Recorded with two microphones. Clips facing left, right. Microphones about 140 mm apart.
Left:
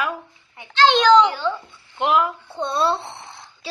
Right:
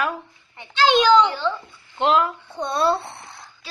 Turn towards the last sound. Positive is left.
turn(degrees=25)  # may be behind; listen again after turning